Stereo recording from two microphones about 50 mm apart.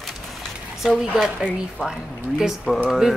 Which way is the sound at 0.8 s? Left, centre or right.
Centre.